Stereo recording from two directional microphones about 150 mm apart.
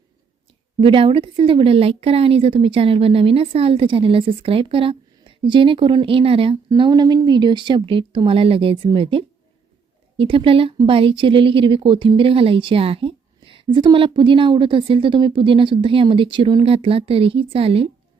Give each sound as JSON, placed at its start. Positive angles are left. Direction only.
{"t": 0.8, "sound": "a woman's voice", "side_deg": -35}